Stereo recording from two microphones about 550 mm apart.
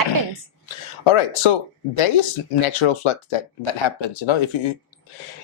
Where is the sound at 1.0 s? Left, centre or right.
Left.